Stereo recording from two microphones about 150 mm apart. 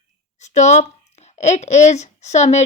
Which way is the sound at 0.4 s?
50° left (ahead or behind).